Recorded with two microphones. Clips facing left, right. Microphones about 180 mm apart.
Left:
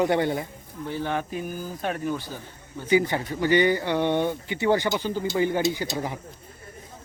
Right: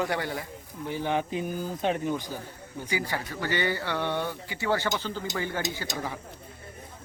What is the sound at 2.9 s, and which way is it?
Speech, 20° left (ahead or behind).